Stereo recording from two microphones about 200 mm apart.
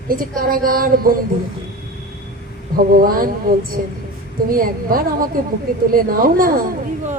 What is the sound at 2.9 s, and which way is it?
A woman's voice, 45° right (ahead or behind).